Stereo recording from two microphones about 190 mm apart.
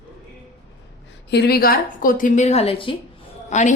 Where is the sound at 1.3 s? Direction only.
60° left (ahead or behind); by 2.9 s 30° left (ahead or behind).